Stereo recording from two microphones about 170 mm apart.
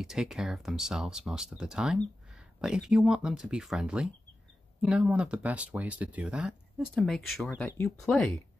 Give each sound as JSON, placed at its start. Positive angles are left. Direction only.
{"t": 0.0, "sound": "speech", "side_deg": -5}